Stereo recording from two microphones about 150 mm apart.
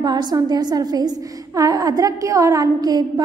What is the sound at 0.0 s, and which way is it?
A woman's voice, 25° right (ahead or behind).